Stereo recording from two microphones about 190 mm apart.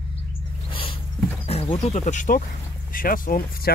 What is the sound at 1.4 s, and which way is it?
Speech, 30° left (ahead or behind).